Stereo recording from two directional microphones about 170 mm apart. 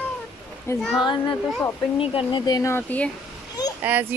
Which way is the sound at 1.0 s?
25° left (ahead or behind).